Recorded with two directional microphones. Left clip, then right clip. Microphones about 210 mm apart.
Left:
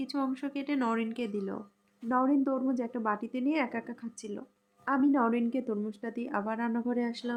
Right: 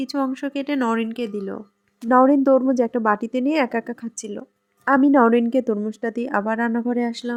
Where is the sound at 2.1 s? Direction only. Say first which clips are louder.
Right 14 dB; 40° right (ahead or behind).